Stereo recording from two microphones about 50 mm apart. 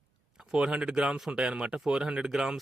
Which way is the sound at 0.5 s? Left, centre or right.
Centre.